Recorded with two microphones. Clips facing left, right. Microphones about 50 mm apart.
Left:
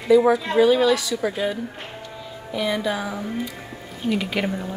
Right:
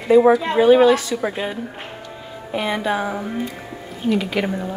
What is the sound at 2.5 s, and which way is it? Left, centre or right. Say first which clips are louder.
Speech: right 2 dB; right.